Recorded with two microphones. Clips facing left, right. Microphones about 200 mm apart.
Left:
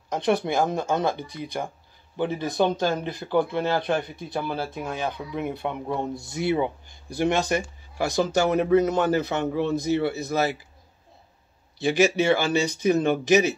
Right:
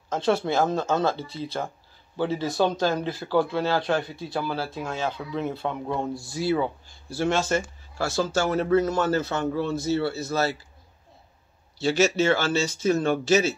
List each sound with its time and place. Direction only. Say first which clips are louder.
0.1 s a man's voice: even; 15° left (ahead or behind)
11.8 s a man's voice: left 1 dB; 15° left (ahead or behind)